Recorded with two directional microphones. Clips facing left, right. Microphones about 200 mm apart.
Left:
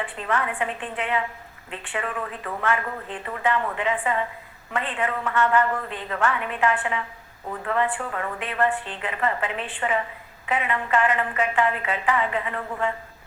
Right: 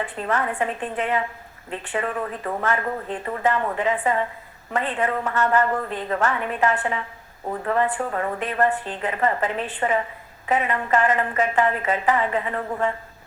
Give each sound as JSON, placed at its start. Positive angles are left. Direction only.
{"t": 0.0, "sound": "a woman's voice", "side_deg": -40}